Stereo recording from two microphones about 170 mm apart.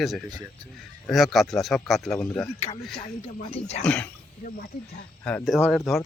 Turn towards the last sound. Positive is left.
turn(degrees=0)  # may be behind; listen again after turning